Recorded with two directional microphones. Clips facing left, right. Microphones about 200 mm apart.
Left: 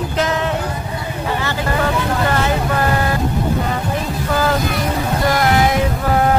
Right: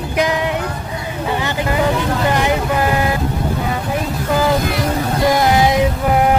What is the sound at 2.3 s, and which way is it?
Vehicle, 15° right (ahead or behind).